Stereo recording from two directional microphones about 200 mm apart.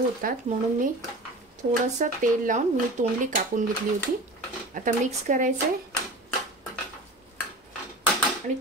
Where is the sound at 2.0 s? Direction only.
40° right (ahead or behind).